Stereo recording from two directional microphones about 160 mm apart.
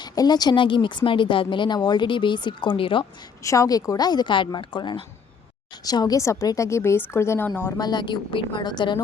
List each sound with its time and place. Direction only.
0.0 s speech: 25° left (ahead or behind)
3.4 s a woman's voice: 20° left (ahead or behind)
7.8 s speech: 25° left (ahead or behind)